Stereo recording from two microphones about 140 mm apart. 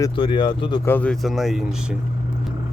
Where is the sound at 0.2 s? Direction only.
35° left (ahead or behind).